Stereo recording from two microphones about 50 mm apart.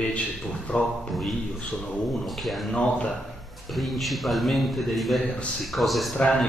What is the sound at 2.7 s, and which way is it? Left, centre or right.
Speech, left.